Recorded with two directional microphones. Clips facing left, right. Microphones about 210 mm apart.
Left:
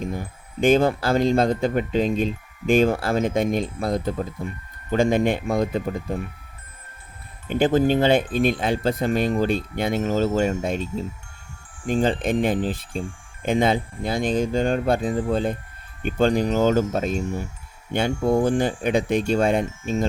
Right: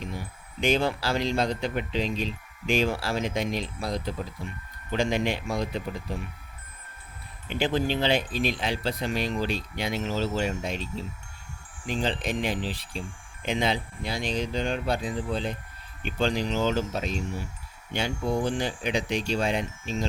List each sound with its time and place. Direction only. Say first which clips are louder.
0.0 s speech: left 7 dB; 50° left (ahead or behind)
7.4 s speech: left 8 dB; 45° left (ahead or behind)